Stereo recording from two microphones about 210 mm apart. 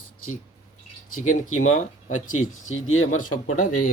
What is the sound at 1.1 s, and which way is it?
Speech, 85° left.